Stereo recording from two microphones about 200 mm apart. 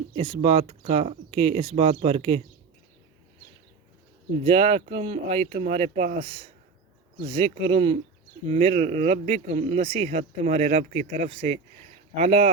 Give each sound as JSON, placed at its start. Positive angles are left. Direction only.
{"t": 0.1, "sound": "speech", "side_deg": -30}
{"t": 4.4, "sound": "speech", "side_deg": -30}